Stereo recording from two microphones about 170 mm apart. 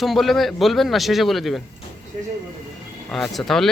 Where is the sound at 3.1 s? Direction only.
5° left (ahead or behind).